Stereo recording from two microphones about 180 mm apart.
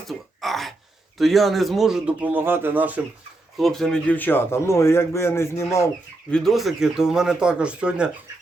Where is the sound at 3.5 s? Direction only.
Centre (ahead or behind).